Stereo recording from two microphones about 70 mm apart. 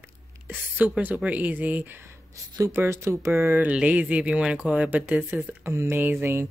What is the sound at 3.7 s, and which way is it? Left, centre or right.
Speech, centre.